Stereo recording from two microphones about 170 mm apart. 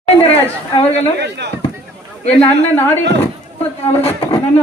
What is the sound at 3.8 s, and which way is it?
Speech, 35° left (ahead or behind).